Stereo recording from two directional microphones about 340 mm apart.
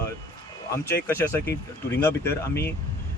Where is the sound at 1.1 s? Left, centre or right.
Centre.